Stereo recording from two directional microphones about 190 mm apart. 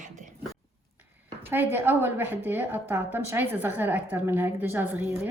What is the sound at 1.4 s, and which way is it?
A woman's voice, 10° right (ahead or behind).